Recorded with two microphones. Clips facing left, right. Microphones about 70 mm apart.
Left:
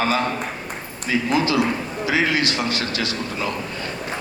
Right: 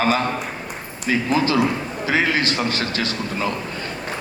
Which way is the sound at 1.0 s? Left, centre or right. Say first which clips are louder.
Right 1 dB; right.